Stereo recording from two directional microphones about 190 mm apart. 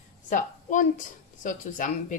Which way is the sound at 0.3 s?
40° left (ahead or behind).